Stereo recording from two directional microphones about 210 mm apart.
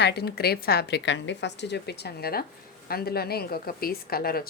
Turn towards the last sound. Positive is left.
turn(degrees=45)  # may be behind; listen again after turning